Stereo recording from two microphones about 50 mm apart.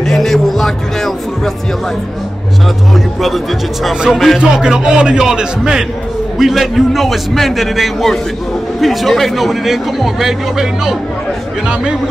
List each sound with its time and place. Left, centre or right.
0.0 s speech: centre
2.9 s a man's voice: centre